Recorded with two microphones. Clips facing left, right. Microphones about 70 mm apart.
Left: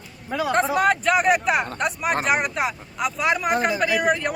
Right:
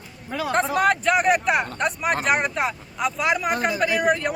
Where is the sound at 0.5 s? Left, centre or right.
Centre.